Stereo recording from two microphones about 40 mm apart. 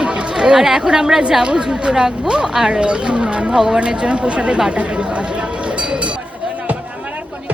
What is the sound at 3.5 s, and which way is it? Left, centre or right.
Speech, centre.